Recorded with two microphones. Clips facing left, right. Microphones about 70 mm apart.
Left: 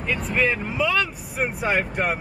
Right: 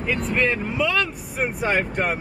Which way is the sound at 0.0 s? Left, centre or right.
Centre.